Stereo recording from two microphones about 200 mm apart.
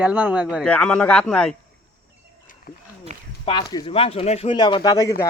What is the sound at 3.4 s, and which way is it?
Speech, 25° left (ahead or behind).